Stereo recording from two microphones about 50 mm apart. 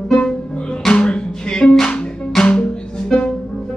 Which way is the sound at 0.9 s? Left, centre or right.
Centre.